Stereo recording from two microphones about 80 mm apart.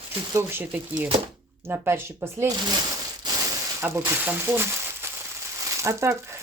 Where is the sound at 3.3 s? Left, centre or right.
Right.